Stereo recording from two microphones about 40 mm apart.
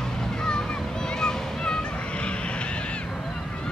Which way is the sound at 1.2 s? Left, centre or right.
Left.